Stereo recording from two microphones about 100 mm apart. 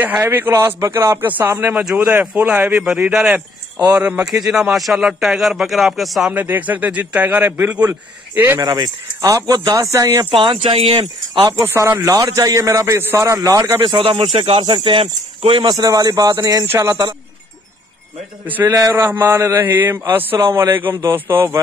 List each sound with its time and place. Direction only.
0.2 s a man's voice: 20° right (ahead or behind)
1.8 s a man's voice: 10° right (ahead or behind)
6.3 s speech: 20° right (ahead or behind)
8.5 s a man's voice: 40° right (ahead or behind)
10.4 s speech: 65° right (ahead or behind)
11.3 s speech: 45° right (ahead or behind)
11.6 s a man's voice: 25° right (ahead or behind)
13.9 s speech: 65° right (ahead or behind); by 14.6 s 80° right
14.6 s speech: 55° right (ahead or behind)
15.7 s a man's voice: 35° right (ahead or behind)
18.7 s a man's voice: 35° right (ahead or behind)
19.1 s a man's voice: 25° right (ahead or behind)